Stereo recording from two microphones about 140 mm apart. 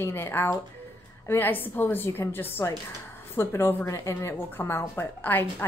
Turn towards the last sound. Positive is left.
turn(degrees=15)  # may be behind; listen again after turning